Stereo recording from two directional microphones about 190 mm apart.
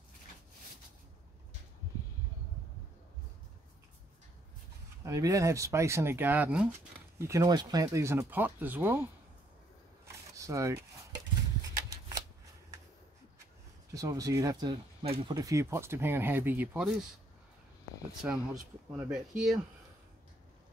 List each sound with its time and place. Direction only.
5.0 s speech: 15° right (ahead or behind)
10.3 s chopping: 15° right (ahead or behind)
11.7 s shuffling cards: 15° right (ahead or behind)
13.9 s speech: 15° right (ahead or behind)
18.2 s speech: 10° right (ahead or behind)